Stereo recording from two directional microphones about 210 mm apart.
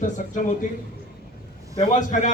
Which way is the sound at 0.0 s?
40° left (ahead or behind).